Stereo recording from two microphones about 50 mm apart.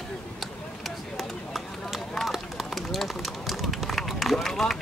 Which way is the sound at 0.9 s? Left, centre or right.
Centre.